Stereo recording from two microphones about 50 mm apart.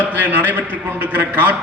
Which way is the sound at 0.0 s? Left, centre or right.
Right.